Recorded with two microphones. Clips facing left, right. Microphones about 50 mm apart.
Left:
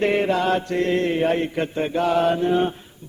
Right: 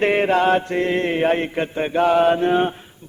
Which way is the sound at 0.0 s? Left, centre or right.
Right.